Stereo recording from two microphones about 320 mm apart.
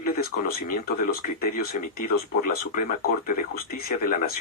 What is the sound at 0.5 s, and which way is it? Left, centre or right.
Speech, left.